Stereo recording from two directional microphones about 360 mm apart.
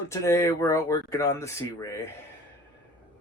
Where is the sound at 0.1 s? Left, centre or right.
Centre.